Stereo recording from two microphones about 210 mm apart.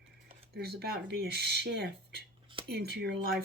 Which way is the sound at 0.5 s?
50° right (ahead or behind).